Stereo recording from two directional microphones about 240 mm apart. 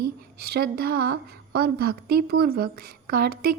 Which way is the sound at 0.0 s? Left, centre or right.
Right.